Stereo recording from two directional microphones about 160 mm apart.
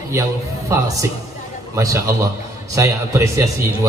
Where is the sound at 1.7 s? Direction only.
20° right (ahead or behind).